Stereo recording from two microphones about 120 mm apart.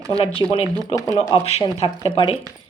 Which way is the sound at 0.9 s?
25° left (ahead or behind).